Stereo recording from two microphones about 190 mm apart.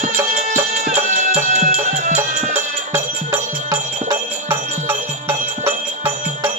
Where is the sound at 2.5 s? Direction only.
10° right (ahead or behind).